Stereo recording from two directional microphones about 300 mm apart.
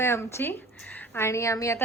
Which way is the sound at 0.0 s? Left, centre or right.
Centre.